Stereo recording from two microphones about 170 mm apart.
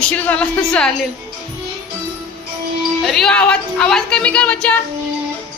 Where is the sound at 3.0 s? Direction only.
Centre (ahead or behind).